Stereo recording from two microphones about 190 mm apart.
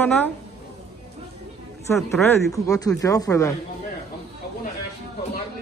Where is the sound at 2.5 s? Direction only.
15° left (ahead or behind).